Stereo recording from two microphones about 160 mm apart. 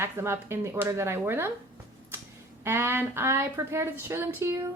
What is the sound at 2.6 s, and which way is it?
A woman's voice, 15° right (ahead or behind).